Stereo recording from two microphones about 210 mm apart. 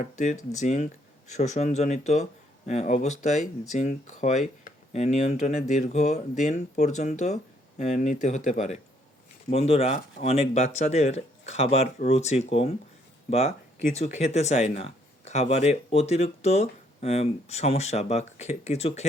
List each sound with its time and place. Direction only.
0.0 s speech: 35° left (ahead or behind)
13.9 s speech: 30° left (ahead or behind)